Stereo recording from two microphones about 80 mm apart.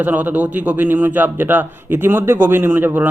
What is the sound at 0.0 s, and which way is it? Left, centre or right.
A man's voice, right.